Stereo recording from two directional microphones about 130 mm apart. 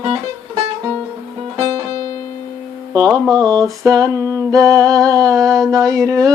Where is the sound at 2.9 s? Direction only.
30° right (ahead or behind).